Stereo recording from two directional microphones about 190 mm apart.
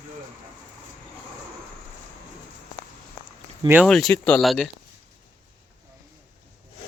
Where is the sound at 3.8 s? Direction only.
5° left (ahead or behind).